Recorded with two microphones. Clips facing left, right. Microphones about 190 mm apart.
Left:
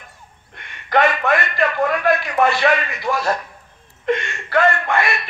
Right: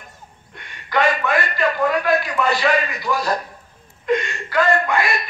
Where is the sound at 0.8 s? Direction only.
55° left (ahead or behind).